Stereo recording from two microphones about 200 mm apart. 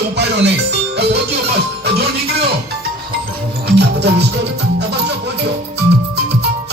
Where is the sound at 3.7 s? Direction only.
55° right (ahead or behind).